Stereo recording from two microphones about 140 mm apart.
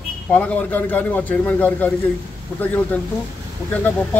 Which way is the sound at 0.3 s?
10° left (ahead or behind).